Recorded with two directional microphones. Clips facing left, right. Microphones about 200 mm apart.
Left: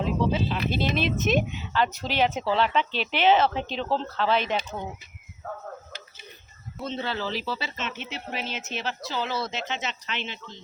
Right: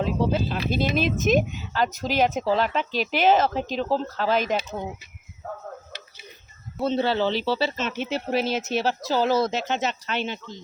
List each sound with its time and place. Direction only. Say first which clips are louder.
0.3 s speech: right 2 dB; 50° right (ahead or behind)
4.5 s speech: right 3 dB; 10° right (ahead or behind)
6.8 s speech: right 8 dB; 35° right (ahead or behind)